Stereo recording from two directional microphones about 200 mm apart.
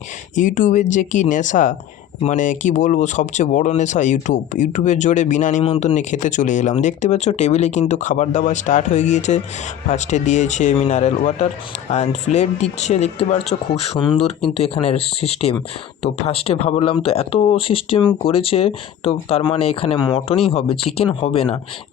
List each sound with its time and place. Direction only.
0.3 s speech: 40° left (ahead or behind)